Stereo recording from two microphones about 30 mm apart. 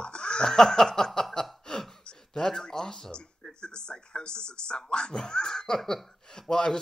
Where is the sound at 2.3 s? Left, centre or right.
Centre.